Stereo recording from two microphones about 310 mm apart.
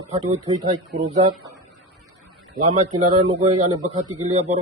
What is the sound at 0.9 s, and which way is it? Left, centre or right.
Speech, right.